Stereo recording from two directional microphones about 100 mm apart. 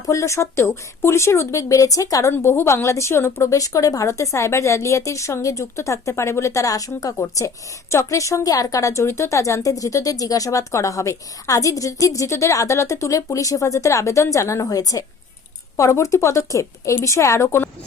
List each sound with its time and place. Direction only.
0.0 s speech: 30° left (ahead or behind)
2.3 s a woman's voice: 25° left (ahead or behind)